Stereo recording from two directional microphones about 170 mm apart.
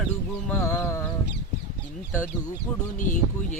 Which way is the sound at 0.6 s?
15° left (ahead or behind).